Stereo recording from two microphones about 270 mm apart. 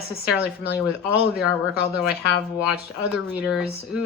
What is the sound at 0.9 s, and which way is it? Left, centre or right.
Speech, centre.